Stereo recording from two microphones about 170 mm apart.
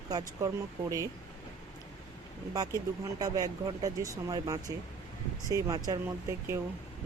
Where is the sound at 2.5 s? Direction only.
20° right (ahead or behind).